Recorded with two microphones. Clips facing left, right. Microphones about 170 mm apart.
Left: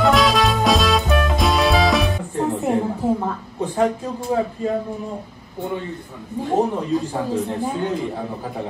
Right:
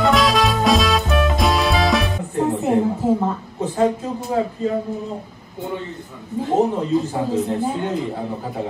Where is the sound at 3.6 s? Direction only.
20° right (ahead or behind).